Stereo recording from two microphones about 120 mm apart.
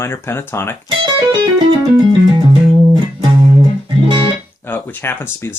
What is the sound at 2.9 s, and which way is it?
Music, 35° right (ahead or behind).